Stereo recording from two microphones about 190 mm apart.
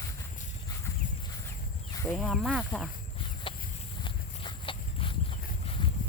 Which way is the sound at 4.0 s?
25° left (ahead or behind).